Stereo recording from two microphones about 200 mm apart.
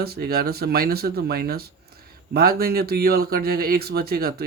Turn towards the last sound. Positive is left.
turn(degrees=-50)  # may be behind; listen again after turning